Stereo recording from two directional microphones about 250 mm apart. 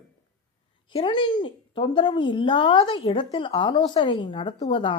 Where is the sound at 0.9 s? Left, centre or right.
Centre.